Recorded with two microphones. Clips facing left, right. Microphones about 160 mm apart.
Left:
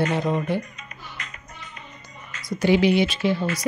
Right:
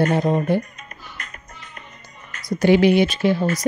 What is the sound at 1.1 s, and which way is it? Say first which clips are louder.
Music: right 1 dB; 50° right (ahead or behind).